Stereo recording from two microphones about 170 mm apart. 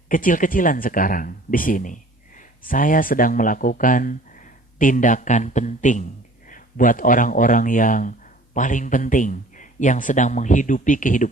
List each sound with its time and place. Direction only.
0.1 s speech: 55° left (ahead or behind)